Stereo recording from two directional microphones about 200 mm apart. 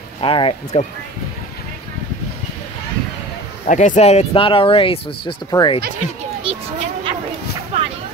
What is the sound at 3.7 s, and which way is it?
Speech, 40° left (ahead or behind).